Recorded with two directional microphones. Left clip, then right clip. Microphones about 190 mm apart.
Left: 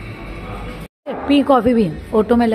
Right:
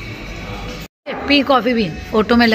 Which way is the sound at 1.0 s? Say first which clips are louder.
Even; 20° left (ahead or behind).